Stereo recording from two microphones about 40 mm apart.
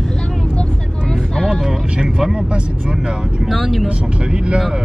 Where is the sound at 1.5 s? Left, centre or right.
Centre.